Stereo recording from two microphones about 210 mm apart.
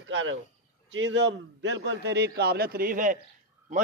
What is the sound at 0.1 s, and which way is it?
A man's voice, 60° right (ahead or behind).